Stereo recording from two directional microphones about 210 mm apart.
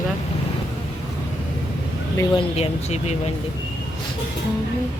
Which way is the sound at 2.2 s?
25° left (ahead or behind).